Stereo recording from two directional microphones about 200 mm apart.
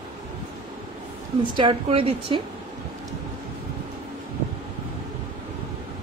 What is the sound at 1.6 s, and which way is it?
Speech, 25° right (ahead or behind).